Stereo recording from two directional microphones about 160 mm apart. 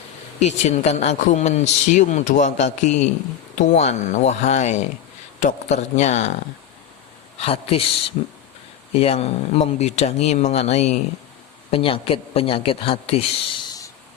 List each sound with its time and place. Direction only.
0.3 s speech: 45° left (ahead or behind)
7.3 s speech: 35° left (ahead or behind)